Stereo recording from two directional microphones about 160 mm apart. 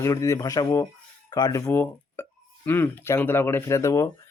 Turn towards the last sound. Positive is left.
turn(degrees=20)  # may be behind; listen again after turning